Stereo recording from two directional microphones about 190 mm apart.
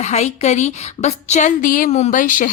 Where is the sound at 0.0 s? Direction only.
35° left (ahead or behind).